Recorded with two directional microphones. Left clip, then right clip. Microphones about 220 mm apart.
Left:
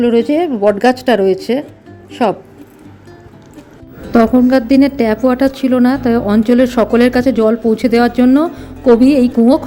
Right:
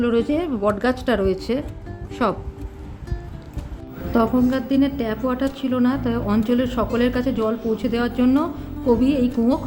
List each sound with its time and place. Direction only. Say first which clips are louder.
0.0 s speech: left 8 dB; 15° left (ahead or behind)
4.1 s speech: left 10 dB; 25° left (ahead or behind)